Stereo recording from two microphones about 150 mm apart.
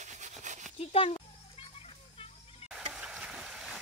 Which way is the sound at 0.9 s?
40° left (ahead or behind).